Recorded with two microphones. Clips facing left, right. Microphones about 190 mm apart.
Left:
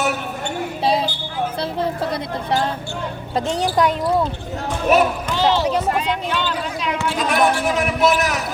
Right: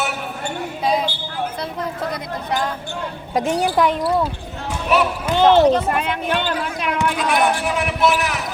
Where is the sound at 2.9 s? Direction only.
15° right (ahead or behind).